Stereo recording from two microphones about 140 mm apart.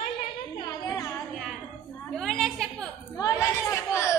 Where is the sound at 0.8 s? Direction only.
25° left (ahead or behind).